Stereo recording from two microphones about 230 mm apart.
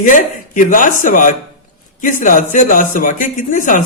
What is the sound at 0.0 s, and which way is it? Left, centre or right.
A man's voice, left.